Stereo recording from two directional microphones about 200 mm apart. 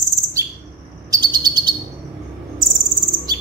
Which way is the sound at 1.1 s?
20° right (ahead or behind).